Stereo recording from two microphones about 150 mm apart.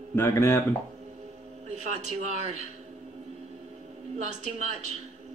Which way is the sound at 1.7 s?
50° right (ahead or behind).